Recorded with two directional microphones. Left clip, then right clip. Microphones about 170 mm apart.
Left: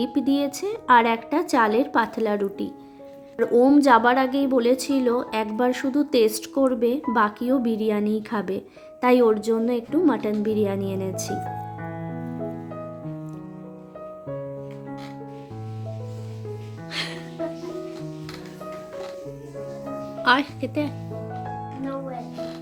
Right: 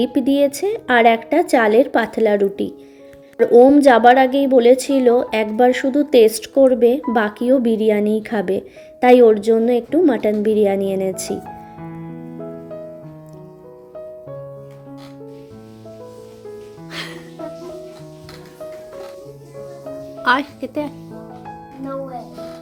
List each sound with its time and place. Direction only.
0.0 s a woman's voice: 5° right (ahead or behind)
16.9 s music: 5° right (ahead or behind)
20.2 s speech: 5° right (ahead or behind)